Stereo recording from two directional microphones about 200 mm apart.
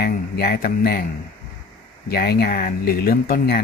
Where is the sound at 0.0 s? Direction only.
50° left (ahead or behind).